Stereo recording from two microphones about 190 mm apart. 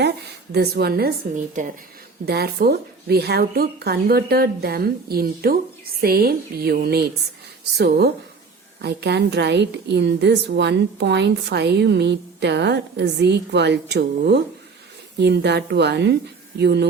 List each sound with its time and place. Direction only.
0.5 s a woman's voice: 55° right (ahead or behind)
2.2 s a woman's voice: 55° right (ahead or behind)